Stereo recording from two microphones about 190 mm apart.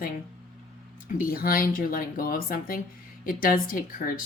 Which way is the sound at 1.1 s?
50° left (ahead or behind).